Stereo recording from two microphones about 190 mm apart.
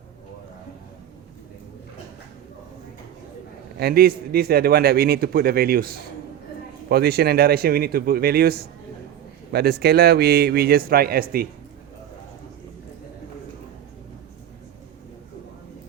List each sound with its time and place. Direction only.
3.8 s a man's voice: 55° right (ahead or behind)